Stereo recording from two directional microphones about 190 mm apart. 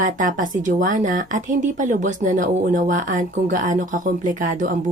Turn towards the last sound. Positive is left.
turn(degrees=-45)  # may be behind; listen again after turning